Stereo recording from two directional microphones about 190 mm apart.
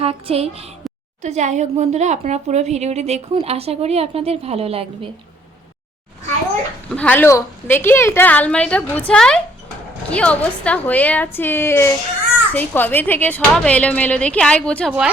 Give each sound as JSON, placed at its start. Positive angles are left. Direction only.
{"t": 0.0, "sound": "speech", "side_deg": -30}
{"t": 6.9, "sound": "a woman's voice", "side_deg": 5}